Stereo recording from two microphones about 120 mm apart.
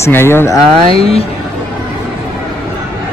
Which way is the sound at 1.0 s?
55° left (ahead or behind).